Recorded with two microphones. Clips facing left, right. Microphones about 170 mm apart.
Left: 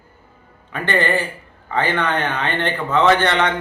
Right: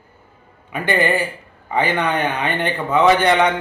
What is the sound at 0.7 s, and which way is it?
Speech, 10° right (ahead or behind).